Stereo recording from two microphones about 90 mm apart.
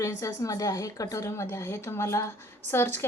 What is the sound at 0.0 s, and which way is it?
A woman's voice, 35° left (ahead or behind).